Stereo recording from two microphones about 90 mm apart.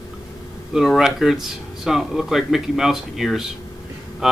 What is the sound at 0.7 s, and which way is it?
Speech, centre (ahead or behind).